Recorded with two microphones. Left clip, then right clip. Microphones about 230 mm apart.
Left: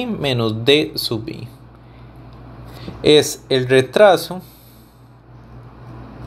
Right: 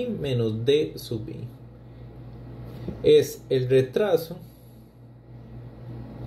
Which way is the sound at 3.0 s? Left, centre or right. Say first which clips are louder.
Left 5 dB; centre.